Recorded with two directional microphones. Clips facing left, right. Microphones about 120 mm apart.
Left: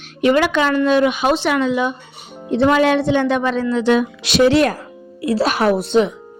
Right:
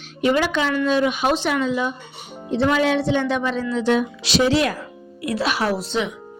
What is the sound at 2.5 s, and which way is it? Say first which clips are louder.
Speech: left 5 dB; 55° left (ahead or behind).